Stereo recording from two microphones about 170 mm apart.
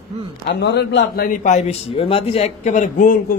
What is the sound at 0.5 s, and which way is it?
Speech, 85° left.